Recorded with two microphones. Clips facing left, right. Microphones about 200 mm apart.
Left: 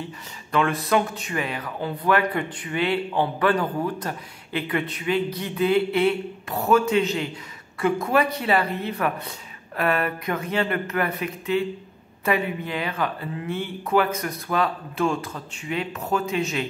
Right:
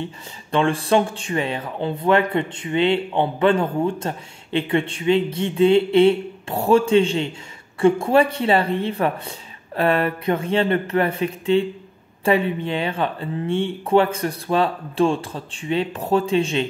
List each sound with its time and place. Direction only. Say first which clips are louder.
0.5 s speech: right 4 dB; 30° right (ahead or behind)